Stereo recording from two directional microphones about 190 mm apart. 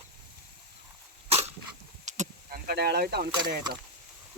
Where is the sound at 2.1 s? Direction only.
40° right (ahead or behind).